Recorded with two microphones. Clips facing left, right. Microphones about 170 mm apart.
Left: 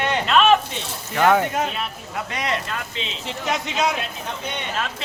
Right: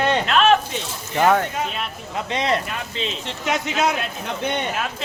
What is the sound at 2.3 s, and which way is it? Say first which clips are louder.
Speech: right 5 dB; 25° right (ahead or behind).